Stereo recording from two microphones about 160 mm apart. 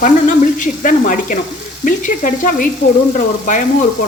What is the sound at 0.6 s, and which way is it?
Speech, 55° left (ahead or behind).